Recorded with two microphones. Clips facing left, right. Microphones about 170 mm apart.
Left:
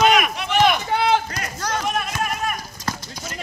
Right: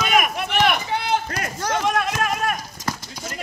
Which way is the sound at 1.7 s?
80° right.